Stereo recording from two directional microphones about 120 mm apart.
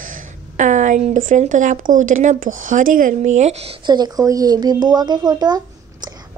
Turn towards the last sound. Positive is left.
turn(degrees=-35)  # may be behind; listen again after turning